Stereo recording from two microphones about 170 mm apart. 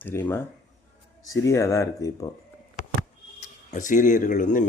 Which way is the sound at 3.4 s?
50° left (ahead or behind).